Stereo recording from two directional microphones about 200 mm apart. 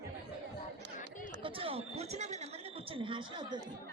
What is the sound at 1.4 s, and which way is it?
Chatter, 30° right (ahead or behind).